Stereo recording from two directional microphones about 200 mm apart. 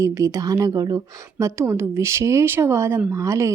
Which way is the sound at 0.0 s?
15° right (ahead or behind).